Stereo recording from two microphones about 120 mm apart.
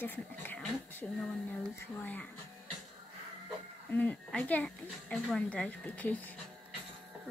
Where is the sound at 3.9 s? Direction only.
15° left (ahead or behind).